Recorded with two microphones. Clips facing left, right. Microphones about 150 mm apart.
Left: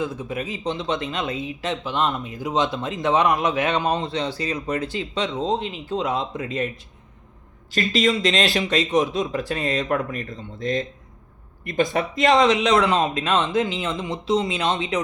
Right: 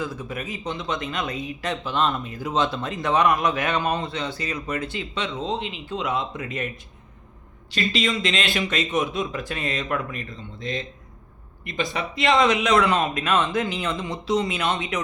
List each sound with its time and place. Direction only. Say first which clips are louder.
0.0 s speech: left 3 dB; 25° left (ahead or behind)
7.7 s speech: left 4 dB; 45° left (ahead or behind)